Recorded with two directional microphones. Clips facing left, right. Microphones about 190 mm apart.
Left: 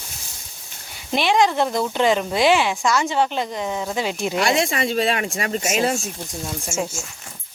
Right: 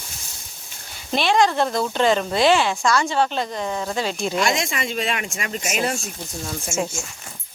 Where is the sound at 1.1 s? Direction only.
15° left (ahead or behind).